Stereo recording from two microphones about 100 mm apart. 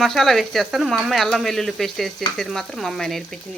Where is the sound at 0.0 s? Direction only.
Centre (ahead or behind).